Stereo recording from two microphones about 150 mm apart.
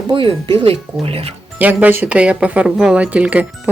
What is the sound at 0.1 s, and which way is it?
Speech, 35° right (ahead or behind).